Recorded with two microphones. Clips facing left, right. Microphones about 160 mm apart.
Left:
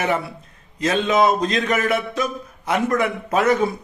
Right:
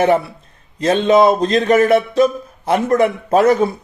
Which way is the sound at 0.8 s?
30° right (ahead or behind).